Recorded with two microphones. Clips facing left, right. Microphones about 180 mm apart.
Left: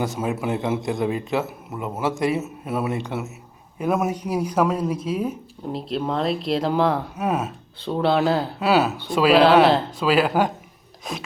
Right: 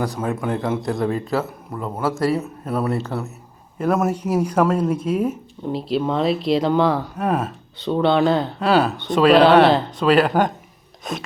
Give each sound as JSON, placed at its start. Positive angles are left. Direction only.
{"t": 0.2, "sound": "a man's voice", "side_deg": 10}
{"t": 2.3, "sound": "speech", "side_deg": 5}
{"t": 2.9, "sound": "a man's voice", "side_deg": 15}
{"t": 3.8, "sound": "speech", "side_deg": 0}